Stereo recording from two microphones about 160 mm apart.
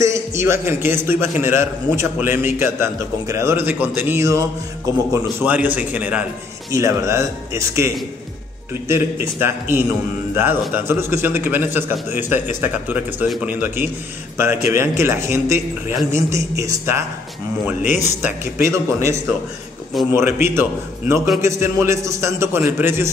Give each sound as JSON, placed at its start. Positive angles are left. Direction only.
{"t": 0.0, "sound": "a man's voice", "side_deg": -20}
{"t": 18.0, "sound": "a man's voice", "side_deg": -15}